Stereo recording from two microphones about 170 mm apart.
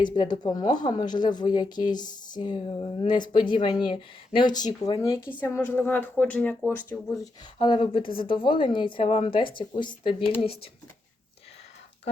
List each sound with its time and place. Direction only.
0.0 s speech: 25° left (ahead or behind)
5.4 s a woman's voice: 10° left (ahead or behind)
7.6 s speech: 30° left (ahead or behind)